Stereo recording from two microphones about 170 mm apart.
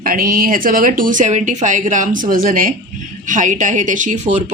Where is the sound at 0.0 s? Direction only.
55° right (ahead or behind).